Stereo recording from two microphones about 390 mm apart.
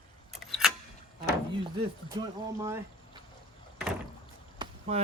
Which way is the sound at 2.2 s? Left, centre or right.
Centre.